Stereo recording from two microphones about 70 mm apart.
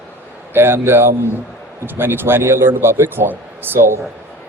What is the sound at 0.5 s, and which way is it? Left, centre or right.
Speech, right.